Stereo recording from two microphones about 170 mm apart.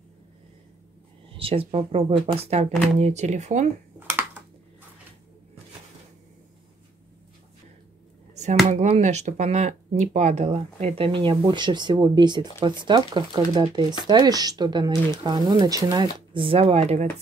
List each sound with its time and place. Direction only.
1.3 s speech: 35° right (ahead or behind)
4.1 s typing: 10° right (ahead or behind)
8.6 s speech: 40° right (ahead or behind)